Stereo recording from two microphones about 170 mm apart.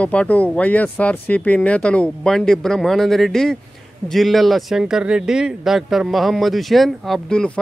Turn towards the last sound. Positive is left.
turn(degrees=5)  # may be behind; listen again after turning